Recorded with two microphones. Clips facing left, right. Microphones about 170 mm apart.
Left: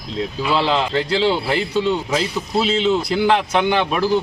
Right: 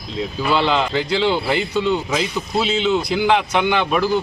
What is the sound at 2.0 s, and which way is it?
Speech, 35° left (ahead or behind).